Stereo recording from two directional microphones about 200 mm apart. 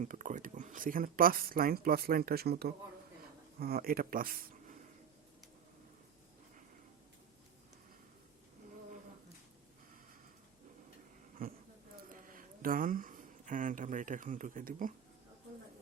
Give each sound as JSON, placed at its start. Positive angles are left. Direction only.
{"t": 0.0, "sound": "speech", "side_deg": -40}
{"t": 11.4, "sound": "a sound", "side_deg": -45}
{"t": 12.0, "sound": "speech", "side_deg": -45}